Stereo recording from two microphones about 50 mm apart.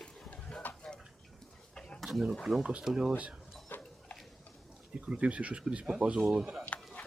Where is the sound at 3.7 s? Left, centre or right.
Left.